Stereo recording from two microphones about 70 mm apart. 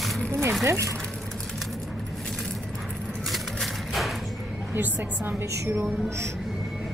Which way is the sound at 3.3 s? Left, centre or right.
Centre.